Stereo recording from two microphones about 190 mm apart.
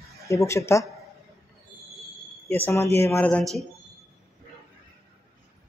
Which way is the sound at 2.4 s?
10° left (ahead or behind).